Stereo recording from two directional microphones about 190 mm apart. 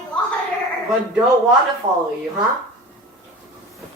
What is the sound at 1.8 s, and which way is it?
Speech, 35° right (ahead or behind).